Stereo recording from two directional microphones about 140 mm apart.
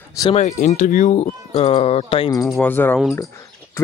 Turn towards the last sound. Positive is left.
turn(degrees=20)  # may be behind; listen again after turning